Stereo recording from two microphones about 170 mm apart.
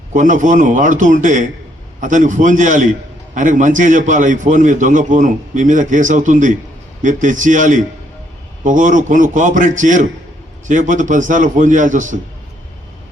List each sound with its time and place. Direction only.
0.1 s a man's voice: 50° right (ahead or behind)